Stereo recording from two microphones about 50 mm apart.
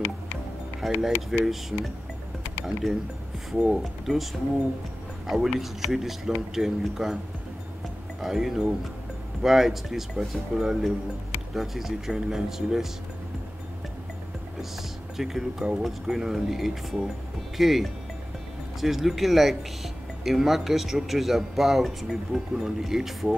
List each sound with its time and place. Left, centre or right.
0.7 s speech: centre
3.5 s speech: centre
3.8 s speech: centre
8.2 s speech: centre
14.6 s speech: centre